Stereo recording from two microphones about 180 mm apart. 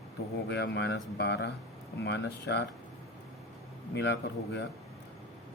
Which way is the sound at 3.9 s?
70° left (ahead or behind).